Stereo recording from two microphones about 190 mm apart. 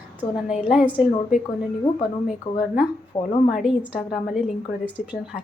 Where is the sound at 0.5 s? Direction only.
5° right (ahead or behind).